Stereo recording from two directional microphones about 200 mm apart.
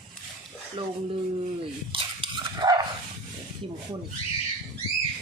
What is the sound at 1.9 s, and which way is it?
Dog, 25° right (ahead or behind).